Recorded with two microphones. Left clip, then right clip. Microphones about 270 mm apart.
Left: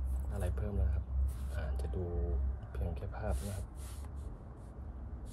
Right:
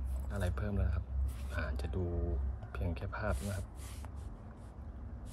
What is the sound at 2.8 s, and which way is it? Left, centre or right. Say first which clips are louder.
Speech: right 3 dB; centre.